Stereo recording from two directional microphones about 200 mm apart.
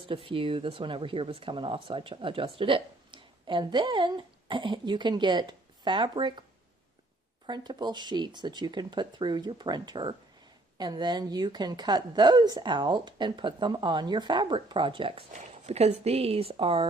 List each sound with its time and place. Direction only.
0.0 s speech: 25° right (ahead or behind)
7.4 s speech: 20° right (ahead or behind)